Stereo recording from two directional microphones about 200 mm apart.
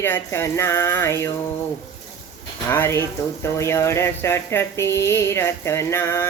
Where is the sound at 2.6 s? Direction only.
10° left (ahead or behind).